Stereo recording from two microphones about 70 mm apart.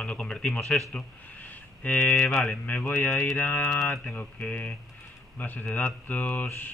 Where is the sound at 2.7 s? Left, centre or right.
Left.